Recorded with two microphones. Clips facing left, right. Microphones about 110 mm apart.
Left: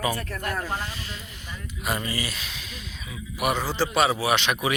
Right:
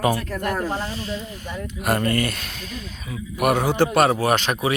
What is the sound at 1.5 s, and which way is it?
A man's voice, 60° right (ahead or behind).